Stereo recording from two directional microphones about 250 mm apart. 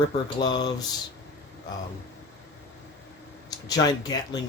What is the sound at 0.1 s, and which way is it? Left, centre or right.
Speech, centre.